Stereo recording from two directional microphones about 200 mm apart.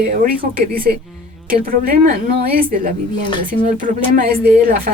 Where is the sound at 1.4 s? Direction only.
45° right (ahead or behind).